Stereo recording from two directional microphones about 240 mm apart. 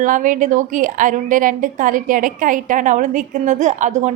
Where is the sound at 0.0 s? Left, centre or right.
Right.